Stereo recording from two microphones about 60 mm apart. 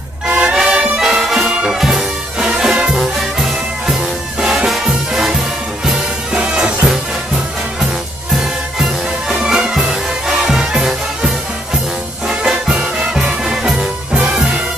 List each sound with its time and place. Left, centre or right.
0.3 s music: centre
9.4 s music: centre